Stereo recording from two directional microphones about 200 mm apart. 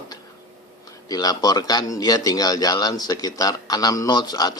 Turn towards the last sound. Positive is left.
turn(degrees=20)  # may be behind; listen again after turning